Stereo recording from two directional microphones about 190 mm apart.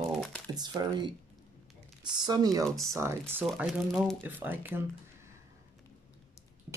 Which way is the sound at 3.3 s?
5° right (ahead or behind).